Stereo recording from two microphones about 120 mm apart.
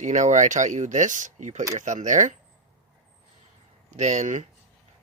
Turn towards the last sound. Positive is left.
turn(degrees=-90)